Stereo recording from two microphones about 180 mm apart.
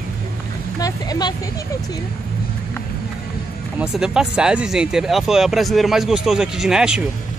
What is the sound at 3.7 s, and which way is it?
Speech, 5° right (ahead or behind).